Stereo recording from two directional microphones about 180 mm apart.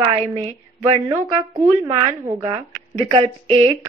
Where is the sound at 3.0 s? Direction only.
30° right (ahead or behind).